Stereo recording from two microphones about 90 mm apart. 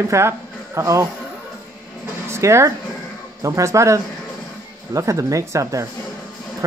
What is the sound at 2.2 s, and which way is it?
Speech, 30° right (ahead or behind).